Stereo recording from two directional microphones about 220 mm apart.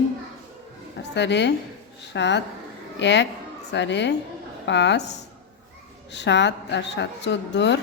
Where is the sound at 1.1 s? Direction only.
50° left (ahead or behind).